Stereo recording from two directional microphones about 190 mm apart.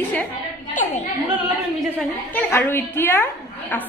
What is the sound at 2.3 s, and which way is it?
Speech, 10° left (ahead or behind).